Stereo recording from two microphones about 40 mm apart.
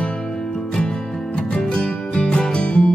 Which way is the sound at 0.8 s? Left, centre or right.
Left.